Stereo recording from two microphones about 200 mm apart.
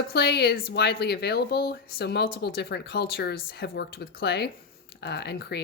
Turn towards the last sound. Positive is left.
turn(degrees=55)  # may be behind; listen again after turning